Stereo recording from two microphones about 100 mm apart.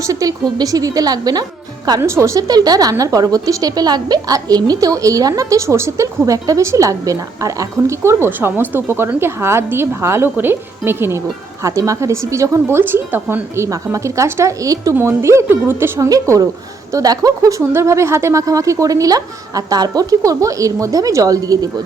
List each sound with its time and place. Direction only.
0.0 s a woman's voice: 35° right (ahead or behind)
2.0 s a woman's voice: 30° right (ahead or behind)
13.7 s a woman's voice: 30° right (ahead or behind)